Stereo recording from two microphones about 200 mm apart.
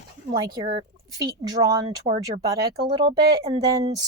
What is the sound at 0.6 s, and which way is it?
Speech, 30° right (ahead or behind).